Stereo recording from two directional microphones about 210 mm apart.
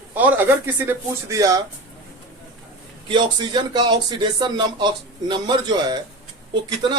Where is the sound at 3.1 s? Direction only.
20° right (ahead or behind).